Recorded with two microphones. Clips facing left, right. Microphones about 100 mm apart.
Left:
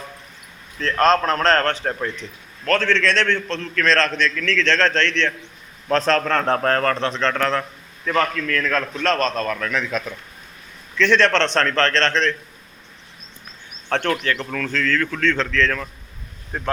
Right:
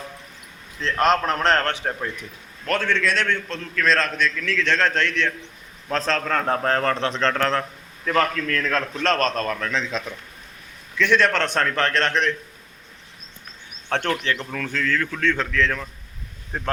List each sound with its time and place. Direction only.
0.8 s a man's voice: 15° right (ahead or behind)
7.1 s a man's voice: 35° right (ahead or behind)
9.1 s a man's voice: 35° left (ahead or behind)
9.5 s speech: 30° right (ahead or behind)
10.9 s a man's voice: 10° right (ahead or behind)
13.9 s a man's voice: 15° right (ahead or behind)